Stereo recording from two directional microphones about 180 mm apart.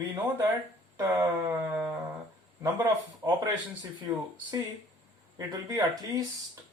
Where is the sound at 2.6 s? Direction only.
15° right (ahead or behind).